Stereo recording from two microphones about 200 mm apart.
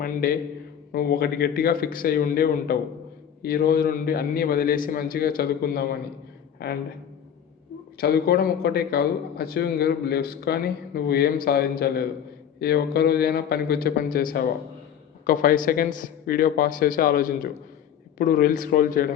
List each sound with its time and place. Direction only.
0.0 s a man's voice: 45° left (ahead or behind)
7.9 s a man's voice: 50° left (ahead or behind)